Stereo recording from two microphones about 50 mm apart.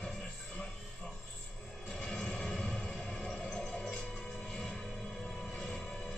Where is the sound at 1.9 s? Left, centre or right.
Centre.